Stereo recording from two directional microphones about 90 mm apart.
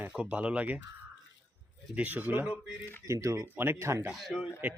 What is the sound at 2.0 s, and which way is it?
Speech, 20° right (ahead or behind).